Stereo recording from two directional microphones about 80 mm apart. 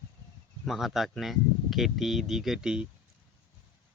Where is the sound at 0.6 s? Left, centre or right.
Centre.